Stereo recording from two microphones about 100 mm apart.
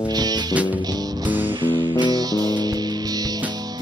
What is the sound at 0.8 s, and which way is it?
Music, 45° right (ahead or behind).